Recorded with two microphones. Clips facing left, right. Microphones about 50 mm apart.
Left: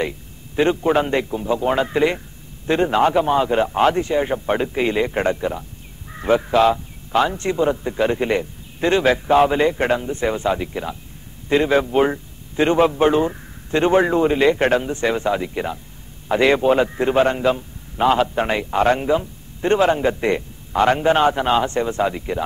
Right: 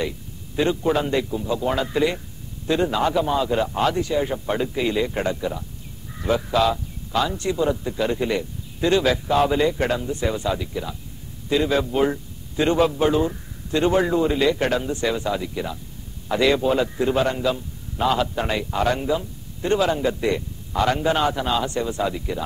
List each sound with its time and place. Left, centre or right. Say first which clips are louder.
0.6 s a man's voice: left 4 dB; left